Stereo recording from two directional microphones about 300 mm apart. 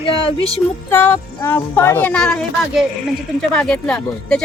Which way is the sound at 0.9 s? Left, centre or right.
Centre.